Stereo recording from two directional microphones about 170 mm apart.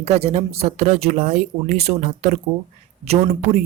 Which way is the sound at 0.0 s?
40° right (ahead or behind).